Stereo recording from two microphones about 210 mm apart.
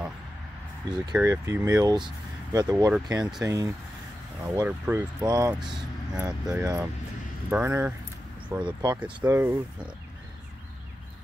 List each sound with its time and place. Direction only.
1.1 s speech: 15° right (ahead or behind)
5.6 s speech: 5° right (ahead or behind)